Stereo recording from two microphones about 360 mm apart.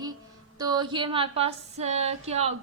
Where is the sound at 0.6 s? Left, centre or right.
Centre.